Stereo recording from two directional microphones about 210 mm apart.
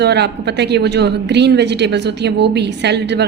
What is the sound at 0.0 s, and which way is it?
A woman's voice, 55° right (ahead or behind).